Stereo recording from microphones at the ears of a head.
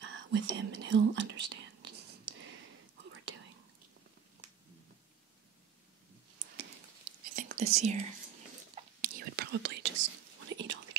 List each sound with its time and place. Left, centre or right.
0.0 s whispering: right
6.3 s whispering: right